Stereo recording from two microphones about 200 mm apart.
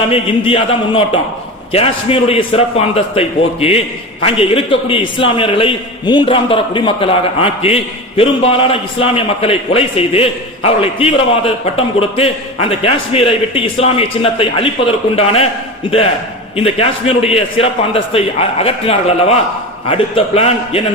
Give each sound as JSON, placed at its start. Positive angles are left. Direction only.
{"t": 0.1, "sound": "a man's voice", "side_deg": 25}
{"t": 16.6, "sound": "a man's voice", "side_deg": 30}